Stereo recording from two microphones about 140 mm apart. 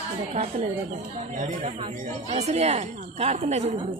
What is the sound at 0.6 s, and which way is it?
Speech, 55° right (ahead or behind).